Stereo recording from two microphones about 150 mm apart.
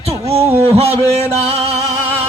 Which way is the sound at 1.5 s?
40° right (ahead or behind).